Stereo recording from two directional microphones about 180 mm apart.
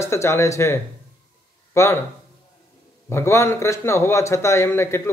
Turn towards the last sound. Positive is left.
turn(degrees=15)  # may be behind; listen again after turning